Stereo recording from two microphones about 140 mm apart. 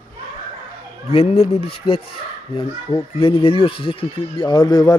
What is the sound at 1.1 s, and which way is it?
Speech, 45° left (ahead or behind).